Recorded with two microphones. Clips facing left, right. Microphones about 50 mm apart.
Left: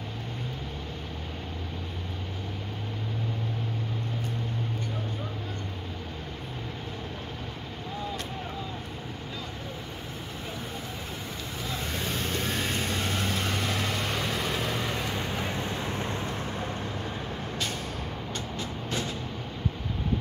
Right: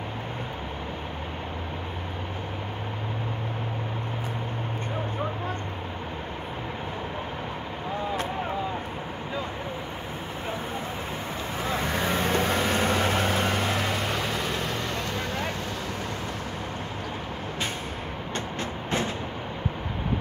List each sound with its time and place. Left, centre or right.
11.6 s vehicle: right
13.5 s vehicle: right
13.7 s vehicle: centre
18.3 s vehicle: right